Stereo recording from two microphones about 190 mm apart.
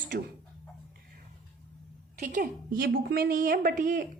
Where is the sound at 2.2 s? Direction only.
40° right (ahead or behind).